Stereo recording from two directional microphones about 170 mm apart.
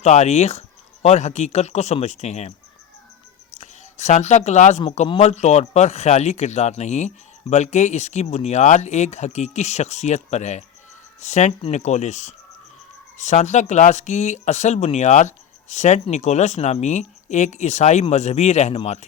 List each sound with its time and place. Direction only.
0.0 s speech: 40° left (ahead or behind)
3.6 s speech: 40° left (ahead or behind)